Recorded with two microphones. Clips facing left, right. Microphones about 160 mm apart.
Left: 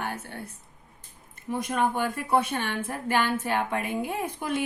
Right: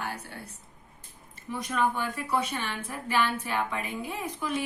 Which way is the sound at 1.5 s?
50° left (ahead or behind).